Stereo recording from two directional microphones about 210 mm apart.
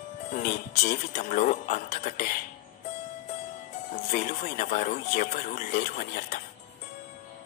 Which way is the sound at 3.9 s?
40° left (ahead or behind).